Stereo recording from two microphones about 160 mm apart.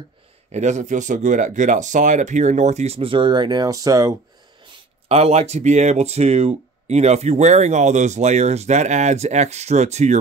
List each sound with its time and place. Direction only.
0.5 s speech: 45° right (ahead or behind); by 4.1 s 20° right (ahead or behind)
5.0 s speech: 40° right (ahead or behind)